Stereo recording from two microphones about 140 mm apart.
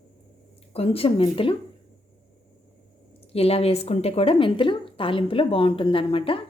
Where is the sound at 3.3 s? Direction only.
45° left (ahead or behind).